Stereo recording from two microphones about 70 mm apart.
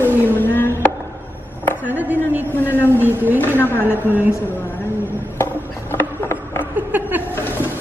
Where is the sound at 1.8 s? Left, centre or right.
Right.